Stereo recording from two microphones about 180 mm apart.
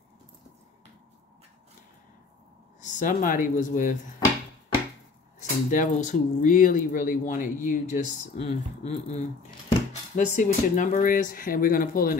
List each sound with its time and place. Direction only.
2.8 s speech: 45° left (ahead or behind)
5.7 s speech: 45° left (ahead or behind)